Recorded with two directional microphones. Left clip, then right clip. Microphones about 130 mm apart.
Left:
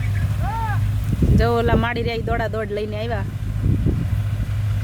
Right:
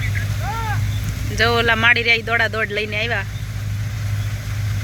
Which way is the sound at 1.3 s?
40° left (ahead or behind).